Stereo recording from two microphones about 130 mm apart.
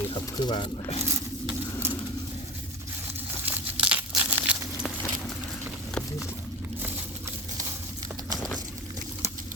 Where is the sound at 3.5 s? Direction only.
10° right (ahead or behind).